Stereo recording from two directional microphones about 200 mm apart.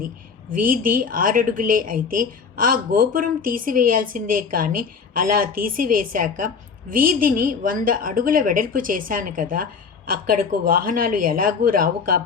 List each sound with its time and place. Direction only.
0.6 s a woman's voice: 45° right (ahead or behind)